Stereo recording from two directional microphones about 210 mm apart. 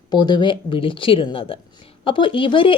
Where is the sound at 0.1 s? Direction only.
20° left (ahead or behind).